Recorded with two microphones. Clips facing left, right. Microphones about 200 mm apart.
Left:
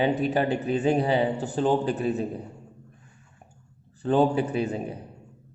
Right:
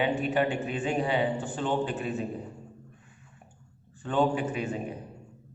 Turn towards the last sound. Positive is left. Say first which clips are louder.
# left 4 dB
turn(degrees=35)  # may be behind; listen again after turning